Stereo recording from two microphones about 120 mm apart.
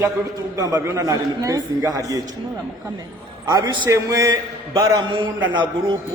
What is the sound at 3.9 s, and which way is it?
Speech, 25° right (ahead or behind).